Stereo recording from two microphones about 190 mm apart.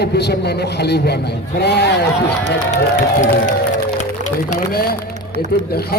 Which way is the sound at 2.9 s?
40° left (ahead or behind).